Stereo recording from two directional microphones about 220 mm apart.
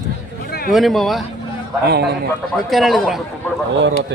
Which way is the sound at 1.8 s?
50° right (ahead or behind).